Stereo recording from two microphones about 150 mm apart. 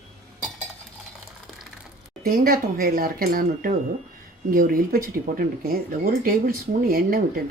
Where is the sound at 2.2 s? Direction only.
70° right (ahead or behind).